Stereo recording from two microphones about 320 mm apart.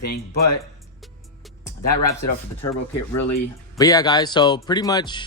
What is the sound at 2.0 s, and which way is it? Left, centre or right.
Speech, left.